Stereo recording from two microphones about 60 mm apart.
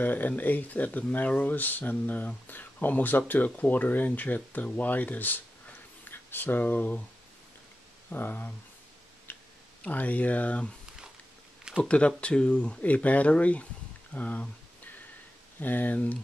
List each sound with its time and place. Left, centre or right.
0.0 s speech: left
8.1 s speech: left
9.3 s tick-tock: left
9.8 s speech: left
11.8 s speech: centre
14.1 s a sound: left
15.6 s speech: left